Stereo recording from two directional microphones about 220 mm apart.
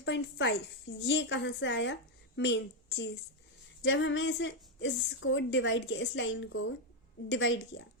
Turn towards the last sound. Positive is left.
turn(degrees=55)  # may be behind; listen again after turning